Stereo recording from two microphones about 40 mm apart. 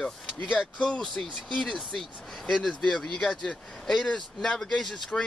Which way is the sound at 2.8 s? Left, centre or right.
Centre.